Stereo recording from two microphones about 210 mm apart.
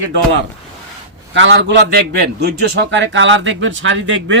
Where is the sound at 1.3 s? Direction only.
60° right (ahead or behind).